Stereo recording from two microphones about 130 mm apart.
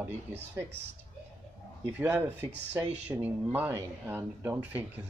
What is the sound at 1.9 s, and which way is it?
Speech, 15° right (ahead or behind).